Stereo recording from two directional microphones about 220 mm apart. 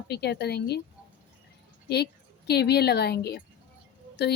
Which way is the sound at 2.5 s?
45° left (ahead or behind).